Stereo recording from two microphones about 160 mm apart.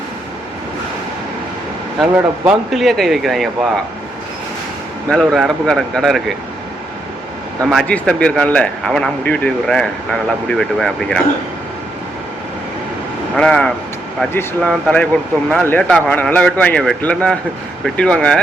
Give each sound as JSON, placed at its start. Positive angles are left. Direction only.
{"t": 2.0, "sound": "speech", "side_deg": 0}
{"t": 5.0, "sound": "speech", "side_deg": 0}
{"t": 7.7, "sound": "speech", "side_deg": 5}
{"t": 13.3, "sound": "speech", "side_deg": 5}